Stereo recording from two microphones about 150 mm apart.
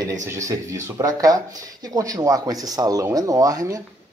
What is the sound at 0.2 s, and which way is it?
Speech, 20° right (ahead or behind).